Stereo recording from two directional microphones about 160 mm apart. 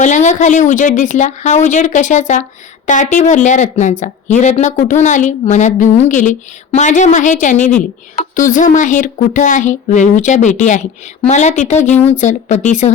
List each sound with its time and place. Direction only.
0.0 s a woman's voice: 50° left (ahead or behind)